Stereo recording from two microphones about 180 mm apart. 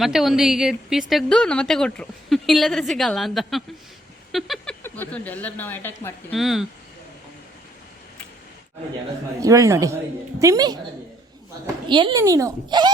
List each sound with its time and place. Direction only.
0.0 s a woman's voice: centre (ahead or behind)
4.3 s a sound: centre (ahead or behind)
4.8 s speech: 10° left (ahead or behind)
6.3 s a woman's voice: centre (ahead or behind)
9.4 s a man's voice: 20° right (ahead or behind)
11.9 s speech: 25° right (ahead or behind)